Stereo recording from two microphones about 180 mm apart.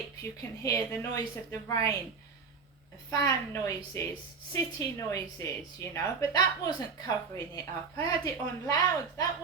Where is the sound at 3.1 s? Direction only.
20° left (ahead or behind).